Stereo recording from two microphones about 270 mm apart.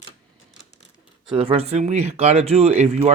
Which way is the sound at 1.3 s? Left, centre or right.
Right.